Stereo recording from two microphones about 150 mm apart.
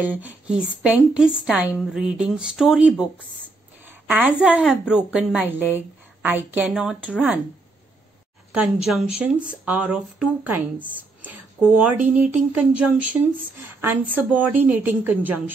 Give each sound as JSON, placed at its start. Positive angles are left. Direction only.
{"t": 0.2, "sound": "a woman's voice", "side_deg": -10}
{"t": 8.8, "sound": "speech", "side_deg": -5}